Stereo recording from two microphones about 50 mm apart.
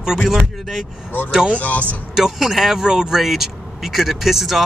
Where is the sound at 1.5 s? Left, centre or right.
Left.